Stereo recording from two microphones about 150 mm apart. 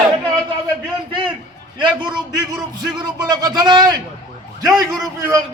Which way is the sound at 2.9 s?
25° right (ahead or behind).